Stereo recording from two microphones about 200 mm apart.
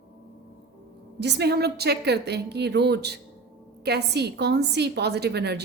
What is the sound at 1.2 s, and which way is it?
A woman's voice, 55° right (ahead or behind).